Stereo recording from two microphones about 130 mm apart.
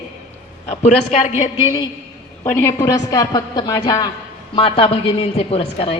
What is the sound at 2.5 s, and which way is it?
A woman's voice, 20° left (ahead or behind).